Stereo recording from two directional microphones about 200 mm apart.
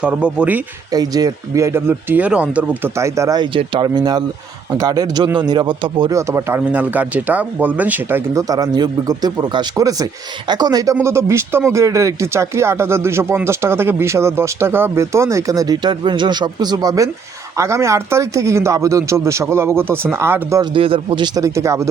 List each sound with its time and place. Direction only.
0.0 s speech: 5° right (ahead or behind)
0.9 s speech: 20° right (ahead or behind)
20.7 s speech: 25° right (ahead or behind)